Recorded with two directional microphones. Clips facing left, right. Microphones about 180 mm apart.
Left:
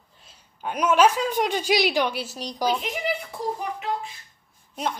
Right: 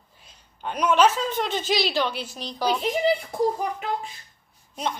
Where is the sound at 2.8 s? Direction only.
30° right (ahead or behind).